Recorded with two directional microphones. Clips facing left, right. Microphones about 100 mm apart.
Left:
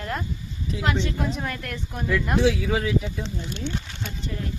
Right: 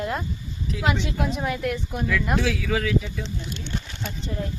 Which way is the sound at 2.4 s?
25° left (ahead or behind).